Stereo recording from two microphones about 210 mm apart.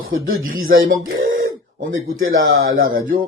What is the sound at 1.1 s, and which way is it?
Speech, 70° right (ahead or behind).